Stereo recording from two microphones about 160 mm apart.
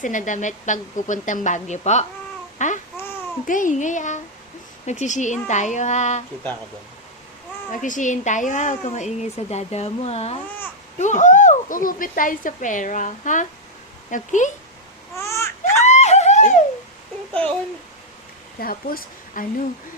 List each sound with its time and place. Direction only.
0.0 s speech: 55° left (ahead or behind)
7.7 s speech: 55° left (ahead or behind)
15.1 s baby cry: 15° left (ahead or behind)
15.8 s a sound: 45° left (ahead or behind)
18.6 s speech: 65° left (ahead or behind)